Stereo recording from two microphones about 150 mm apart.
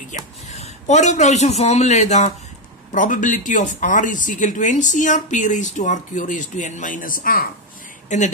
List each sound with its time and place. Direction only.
0.1 s speech: 50° left (ahead or behind); by 7.4 s 70° left (ahead or behind)
8.1 s speech: 55° left (ahead or behind)